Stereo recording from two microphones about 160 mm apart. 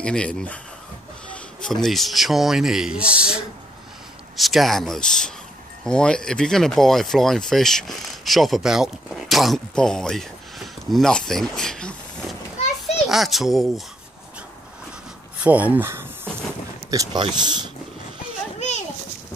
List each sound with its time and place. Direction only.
0.0 s speech: 5° left (ahead or behind)
12.9 s speech: centre (ahead or behind)
15.4 s a sound: 10° right (ahead or behind)
16.9 s speech: 25° right (ahead or behind)